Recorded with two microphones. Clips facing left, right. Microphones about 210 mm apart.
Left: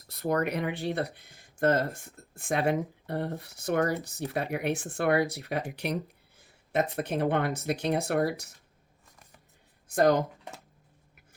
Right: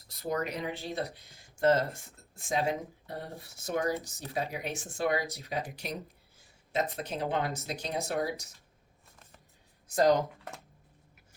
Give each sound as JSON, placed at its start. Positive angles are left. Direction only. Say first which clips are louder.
{"t": 0.1, "sound": "speech", "louder": "left 5 dB", "side_deg": 60}
{"t": 9.9, "sound": "speech", "louder": "left 2 dB", "side_deg": 50}